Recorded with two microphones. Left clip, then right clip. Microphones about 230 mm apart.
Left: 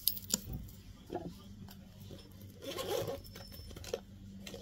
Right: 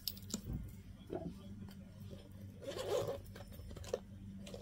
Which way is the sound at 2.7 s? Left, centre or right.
Left.